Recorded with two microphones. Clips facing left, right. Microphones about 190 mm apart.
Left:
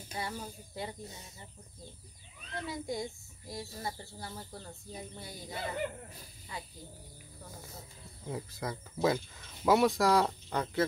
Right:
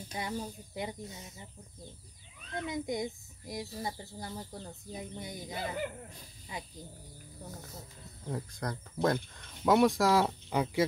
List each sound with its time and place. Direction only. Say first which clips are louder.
0.1 s a child's voice: right 2 dB; 15° right (ahead or behind)
2.5 s a child's voice: right 3 dB; 20° right (ahead or behind)
8.3 s speech: right 1 dB; 5° left (ahead or behind)